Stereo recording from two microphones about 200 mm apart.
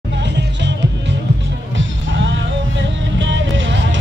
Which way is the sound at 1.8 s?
70° right (ahead or behind).